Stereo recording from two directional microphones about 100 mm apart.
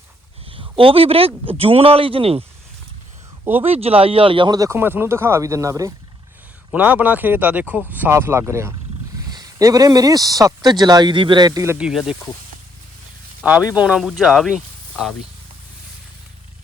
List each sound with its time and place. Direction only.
0.4 s a man's voice: 60° right (ahead or behind)
3.6 s a man's voice: 80° right; by 4.5 s 60° right (ahead or behind)
4.5 s a man's voice: 35° right (ahead or behind)
4.8 s speech: 20° right (ahead or behind)
6.7 s speech: 15° right (ahead or behind)
9.3 s a man's voice: 35° right (ahead or behind)
11.8 s speech: 5° right (ahead or behind)
13.4 s speech: 10° right (ahead or behind)